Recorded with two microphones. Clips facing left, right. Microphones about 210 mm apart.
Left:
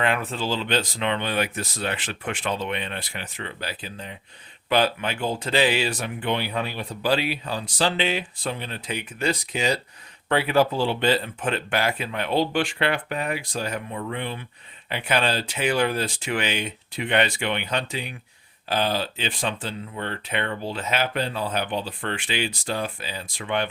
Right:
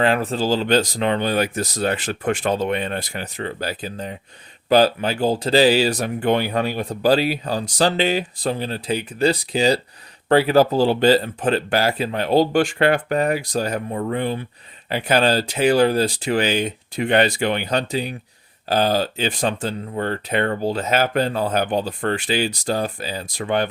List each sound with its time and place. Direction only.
0.0 s speech: 35° right (ahead or behind)